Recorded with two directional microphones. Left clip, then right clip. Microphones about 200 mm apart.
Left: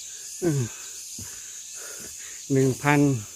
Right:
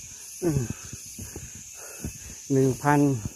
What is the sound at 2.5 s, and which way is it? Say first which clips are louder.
Speech: even; 20° left (ahead or behind).